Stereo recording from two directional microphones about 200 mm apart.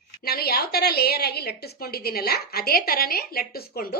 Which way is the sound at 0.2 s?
50° left (ahead or behind).